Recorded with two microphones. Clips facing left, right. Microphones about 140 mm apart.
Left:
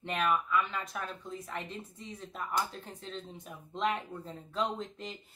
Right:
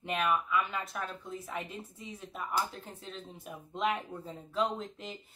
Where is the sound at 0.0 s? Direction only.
5° right (ahead or behind).